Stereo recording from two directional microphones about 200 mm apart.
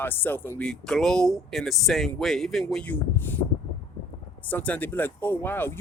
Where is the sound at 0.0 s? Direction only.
10° left (ahead or behind).